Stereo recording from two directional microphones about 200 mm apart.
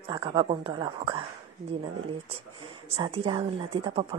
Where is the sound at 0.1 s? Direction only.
25° right (ahead or behind).